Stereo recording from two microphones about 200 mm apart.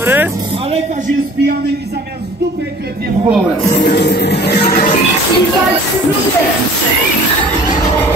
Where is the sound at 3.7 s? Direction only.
55° left (ahead or behind).